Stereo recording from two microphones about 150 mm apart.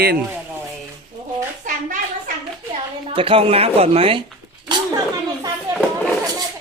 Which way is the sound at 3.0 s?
35° right (ahead or behind).